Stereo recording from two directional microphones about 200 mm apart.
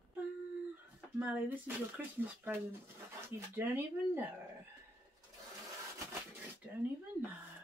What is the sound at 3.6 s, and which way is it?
Speech, 10° right (ahead or behind).